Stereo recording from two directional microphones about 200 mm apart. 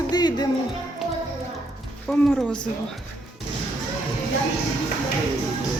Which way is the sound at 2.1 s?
Centre (ahead or behind).